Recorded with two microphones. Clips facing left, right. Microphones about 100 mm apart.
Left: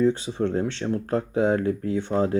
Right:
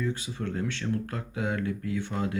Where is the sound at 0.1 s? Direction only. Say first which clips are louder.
Left 9 dB; 25° left (ahead or behind).